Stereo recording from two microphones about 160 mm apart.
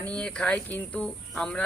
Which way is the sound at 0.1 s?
5° left (ahead or behind).